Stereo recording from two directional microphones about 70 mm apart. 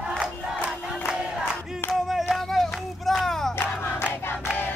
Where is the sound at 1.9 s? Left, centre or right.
Centre.